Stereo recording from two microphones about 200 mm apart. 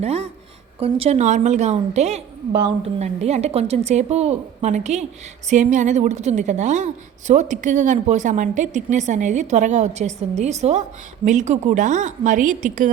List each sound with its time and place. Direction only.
0.0 s a woman's voice: 30° right (ahead or behind)